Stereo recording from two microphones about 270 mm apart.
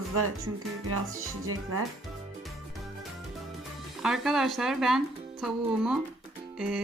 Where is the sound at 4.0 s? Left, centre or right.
Centre.